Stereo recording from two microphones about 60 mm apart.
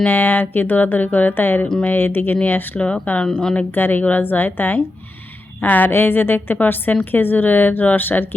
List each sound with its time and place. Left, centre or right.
0.0 s a woman's voice: left